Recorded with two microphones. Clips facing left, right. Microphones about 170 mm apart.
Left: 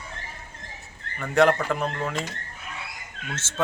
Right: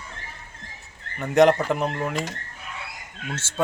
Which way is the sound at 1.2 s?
15° right (ahead or behind).